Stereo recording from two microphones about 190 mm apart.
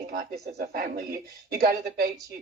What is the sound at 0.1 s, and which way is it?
A woman's voice, 50° right (ahead or behind).